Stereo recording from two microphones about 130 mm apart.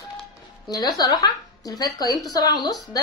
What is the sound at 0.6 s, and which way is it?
A woman's voice, 30° left (ahead or behind).